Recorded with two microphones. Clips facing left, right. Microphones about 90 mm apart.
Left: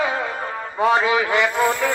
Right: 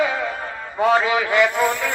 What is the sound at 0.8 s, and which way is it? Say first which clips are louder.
A man's voice: even; 25° left (ahead or behind).